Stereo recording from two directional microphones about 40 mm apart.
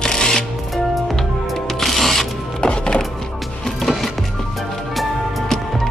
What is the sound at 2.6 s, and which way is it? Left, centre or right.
Music, left.